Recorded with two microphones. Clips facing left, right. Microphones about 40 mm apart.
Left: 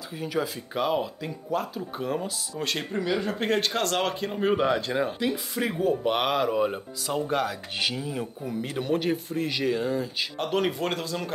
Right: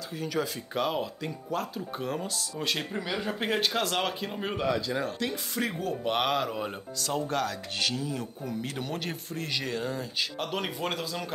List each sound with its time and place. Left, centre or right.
0.2 s speech: centre
4.6 s speech: left
4.9 s speech: centre